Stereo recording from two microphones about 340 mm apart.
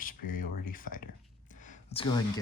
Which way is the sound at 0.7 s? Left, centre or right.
Left.